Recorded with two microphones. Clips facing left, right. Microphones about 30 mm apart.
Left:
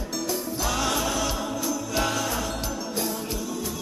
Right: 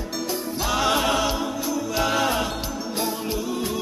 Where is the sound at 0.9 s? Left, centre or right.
Right.